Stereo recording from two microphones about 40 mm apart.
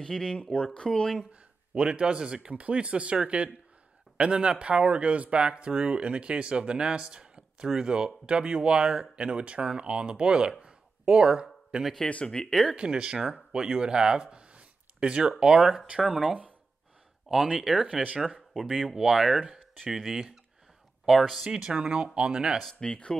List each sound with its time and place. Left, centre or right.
0.0 s speech: centre
1.3 s speech: right
10.6 s a sound: right
11.7 s speech: right
12.3 s speech: centre
12.7 s speech: right
18.9 s speech: centre
21.5 s speech: centre
22.8 s speech: left